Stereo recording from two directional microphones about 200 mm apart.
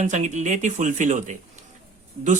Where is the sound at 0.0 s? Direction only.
35° right (ahead or behind).